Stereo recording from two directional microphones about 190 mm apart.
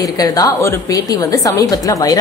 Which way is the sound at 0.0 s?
20° left (ahead or behind).